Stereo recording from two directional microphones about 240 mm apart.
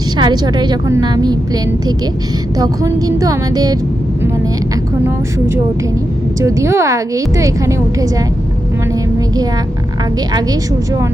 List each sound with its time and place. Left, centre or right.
0.2 s a woman's voice: centre
2.6 s a woman's voice: centre
6.4 s a woman's voice: centre